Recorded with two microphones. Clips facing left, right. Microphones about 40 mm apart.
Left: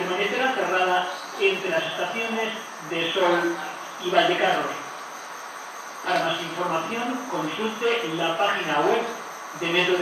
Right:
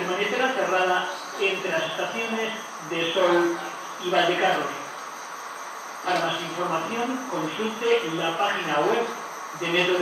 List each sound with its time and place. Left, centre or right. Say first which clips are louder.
0.0 s speech: left 1 dB; centre
6.0 s speech: left 1 dB; centre